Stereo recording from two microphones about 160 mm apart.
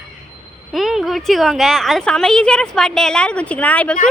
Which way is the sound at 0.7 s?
Centre (ahead or behind).